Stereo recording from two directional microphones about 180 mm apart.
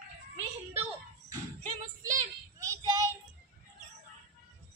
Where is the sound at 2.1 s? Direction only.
20° right (ahead or behind).